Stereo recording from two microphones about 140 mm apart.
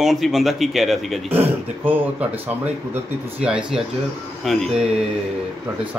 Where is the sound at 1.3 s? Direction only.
15° right (ahead or behind).